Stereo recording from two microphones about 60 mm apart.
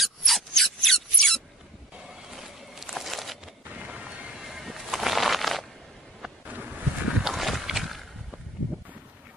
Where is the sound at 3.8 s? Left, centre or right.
Right.